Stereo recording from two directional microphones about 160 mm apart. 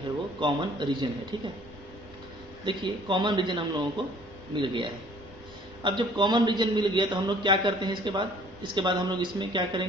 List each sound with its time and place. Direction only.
0.4 s a man's voice: 30° right (ahead or behind)
2.6 s a man's voice: 30° right (ahead or behind)